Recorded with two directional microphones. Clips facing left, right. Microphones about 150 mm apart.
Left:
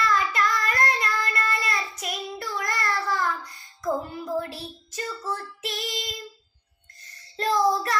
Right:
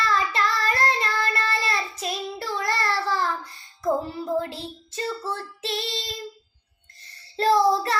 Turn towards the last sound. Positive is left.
turn(degrees=-30)  # may be behind; listen again after turning